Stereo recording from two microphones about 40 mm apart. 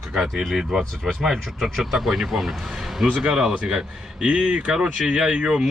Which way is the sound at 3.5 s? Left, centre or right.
Right.